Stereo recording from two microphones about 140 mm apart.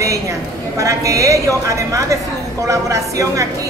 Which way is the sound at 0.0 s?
25° right (ahead or behind).